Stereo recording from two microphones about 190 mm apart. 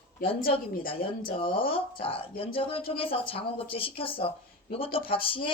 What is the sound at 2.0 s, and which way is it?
Speech, 30° left (ahead or behind).